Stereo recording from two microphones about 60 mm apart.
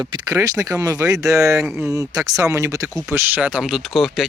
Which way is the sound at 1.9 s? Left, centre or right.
Right.